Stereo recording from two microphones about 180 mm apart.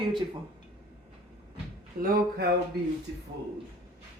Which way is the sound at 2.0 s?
55° right (ahead or behind).